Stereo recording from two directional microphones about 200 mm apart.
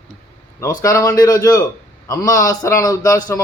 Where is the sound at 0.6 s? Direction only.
15° left (ahead or behind).